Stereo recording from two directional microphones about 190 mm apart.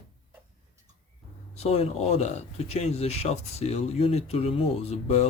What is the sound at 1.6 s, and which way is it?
Speech, 35° left (ahead or behind).